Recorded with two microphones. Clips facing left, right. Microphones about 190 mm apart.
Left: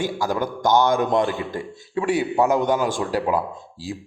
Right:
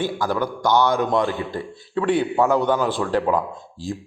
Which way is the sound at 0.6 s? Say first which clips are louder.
Left 1 dB; 45° left (ahead or behind).